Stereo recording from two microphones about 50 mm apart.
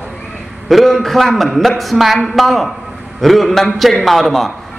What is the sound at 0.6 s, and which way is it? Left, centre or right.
A man's voice, centre.